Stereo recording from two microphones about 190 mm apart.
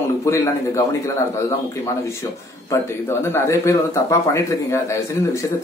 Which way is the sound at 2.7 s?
15° left (ahead or behind).